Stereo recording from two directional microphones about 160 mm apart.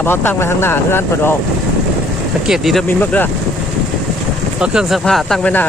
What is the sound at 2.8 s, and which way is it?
Speech, 10° left (ahead or behind).